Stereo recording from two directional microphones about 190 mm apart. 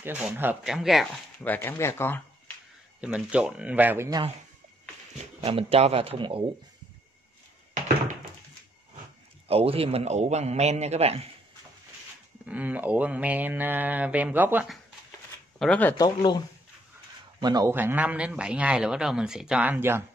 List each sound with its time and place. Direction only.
0.0 s speech: 5° right (ahead or behind)
1.4 s speech: 10° left (ahead or behind)
3.0 s a man's voice: 5° right (ahead or behind)
5.4 s a man's voice: 30° right (ahead or behind)
9.5 s a man's voice: 30° right (ahead or behind)
12.4 s a man's voice: 10° right (ahead or behind)
15.6 s speech: 10° left (ahead or behind)
17.4 s a man's voice: 20° right (ahead or behind)